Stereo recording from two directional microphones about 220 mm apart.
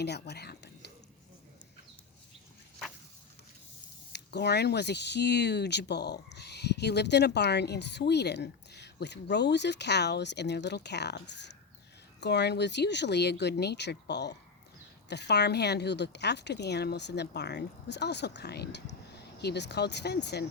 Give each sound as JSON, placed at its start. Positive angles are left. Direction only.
{"t": 0.0, "sound": "speech", "side_deg": 50}
{"t": 4.1, "sound": "speech", "side_deg": 50}